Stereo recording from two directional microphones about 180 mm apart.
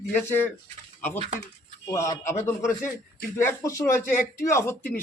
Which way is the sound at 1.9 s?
15° left (ahead or behind).